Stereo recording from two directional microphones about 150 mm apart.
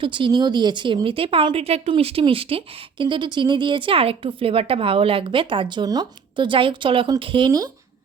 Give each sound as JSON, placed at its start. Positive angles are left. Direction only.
{"t": 0.0, "sound": "speech", "side_deg": -35}